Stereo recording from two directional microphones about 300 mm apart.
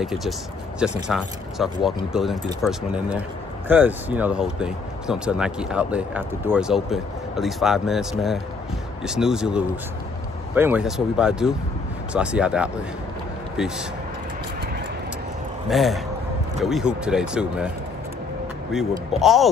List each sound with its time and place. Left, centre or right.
0.0 s speech: centre
15.7 s speech: centre
18.7 s speech: centre